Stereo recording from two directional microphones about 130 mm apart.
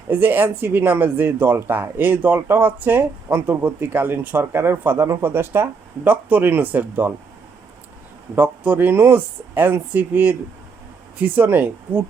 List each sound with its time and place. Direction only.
0.1 s speech: 15° right (ahead or behind)
8.4 s speech: 10° right (ahead or behind)